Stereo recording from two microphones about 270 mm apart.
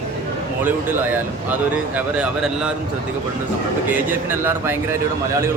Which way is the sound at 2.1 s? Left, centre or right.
Centre.